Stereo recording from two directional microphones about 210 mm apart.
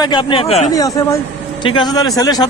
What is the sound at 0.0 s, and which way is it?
Speech, 20° left (ahead or behind).